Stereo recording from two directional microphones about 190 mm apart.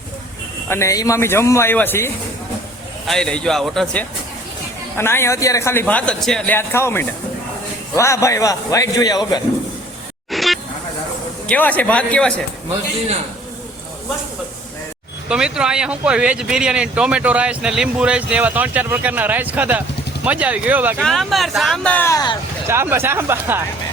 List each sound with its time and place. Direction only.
0.7 s speech: 15° left (ahead or behind)
4.9 s speech: 15° left (ahead or behind)
10.3 s a sound: centre (ahead or behind)
11.4 s speech: 10° left (ahead or behind)
15.3 s speech: 5° right (ahead or behind); by 22.4 s 20° left (ahead or behind)
22.6 s speech: 15° right (ahead or behind)